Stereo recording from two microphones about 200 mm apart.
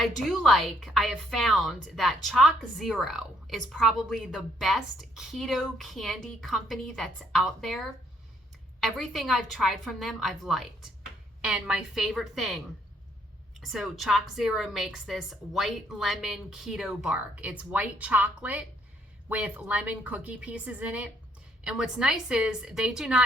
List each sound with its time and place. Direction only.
0.0 s a woman's voice: centre (ahead or behind)
13.6 s a woman's voice: centre (ahead or behind)